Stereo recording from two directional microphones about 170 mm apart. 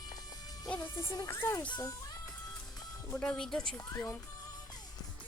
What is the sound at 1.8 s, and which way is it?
Music, 20° left (ahead or behind).